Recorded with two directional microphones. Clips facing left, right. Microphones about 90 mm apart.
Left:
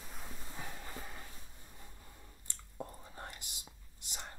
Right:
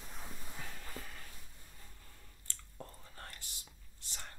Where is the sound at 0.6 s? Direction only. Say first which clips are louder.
Left 3 dB; 20° left (ahead or behind).